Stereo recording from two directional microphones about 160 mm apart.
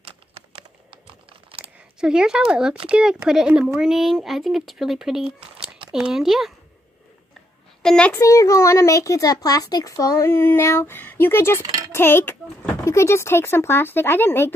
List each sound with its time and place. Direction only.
2.0 s speech: 5° right (ahead or behind)
7.8 s a child's voice: 5° left (ahead or behind)
8.1 s a child's voice: 20° left (ahead or behind)